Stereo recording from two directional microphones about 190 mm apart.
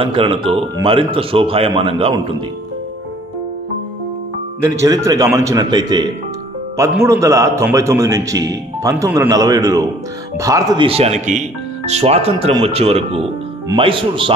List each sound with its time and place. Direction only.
0.0 s speech: 30° right (ahead or behind)
4.6 s a man's voice: 15° right (ahead or behind)
10.9 s speech: 35° right (ahead or behind)